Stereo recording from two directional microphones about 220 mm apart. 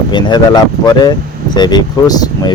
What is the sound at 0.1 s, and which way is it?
Speech, 20° left (ahead or behind).